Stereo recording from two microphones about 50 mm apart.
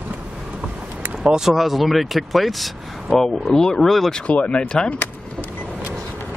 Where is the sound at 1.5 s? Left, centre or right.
Centre.